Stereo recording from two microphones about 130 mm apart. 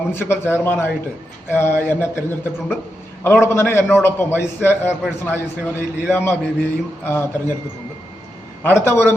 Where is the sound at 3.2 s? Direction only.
20° left (ahead or behind).